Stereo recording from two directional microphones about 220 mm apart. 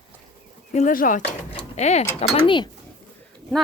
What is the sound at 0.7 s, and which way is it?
Speech, 35° left (ahead or behind).